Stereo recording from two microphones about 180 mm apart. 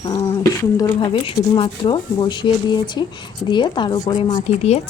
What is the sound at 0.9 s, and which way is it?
Speech, 25° left (ahead or behind).